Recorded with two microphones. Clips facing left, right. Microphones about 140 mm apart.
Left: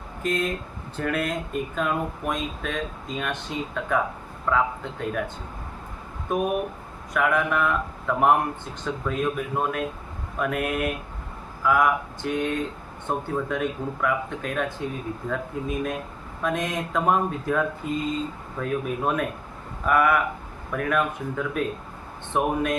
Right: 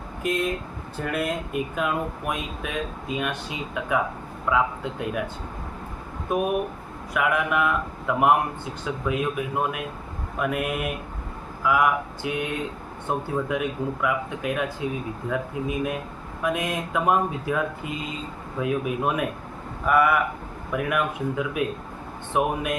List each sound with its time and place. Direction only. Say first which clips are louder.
0.2 s speech: right 1 dB; 10° right (ahead or behind)
6.3 s speech: right 1 dB; 10° right (ahead or behind)
17.8 s a sound: left 4 dB; 70° right (ahead or behind)
18.6 s speech: right 1 dB; 10° right (ahead or behind)